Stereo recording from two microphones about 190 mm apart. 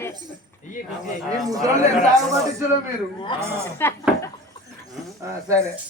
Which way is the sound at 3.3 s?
25° left (ahead or behind).